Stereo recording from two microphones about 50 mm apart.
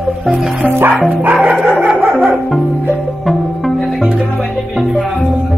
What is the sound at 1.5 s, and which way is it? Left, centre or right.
Music, centre.